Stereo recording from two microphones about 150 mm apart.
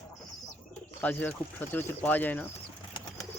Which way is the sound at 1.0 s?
10° left (ahead or behind).